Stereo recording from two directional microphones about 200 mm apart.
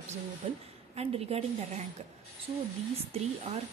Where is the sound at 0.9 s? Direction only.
30° right (ahead or behind).